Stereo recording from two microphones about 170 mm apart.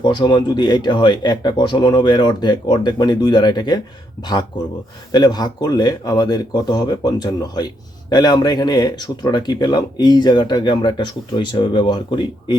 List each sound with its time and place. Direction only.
0.0 s speech: 25° left (ahead or behind)